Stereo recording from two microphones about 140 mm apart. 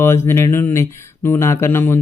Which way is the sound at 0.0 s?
15° left (ahead or behind).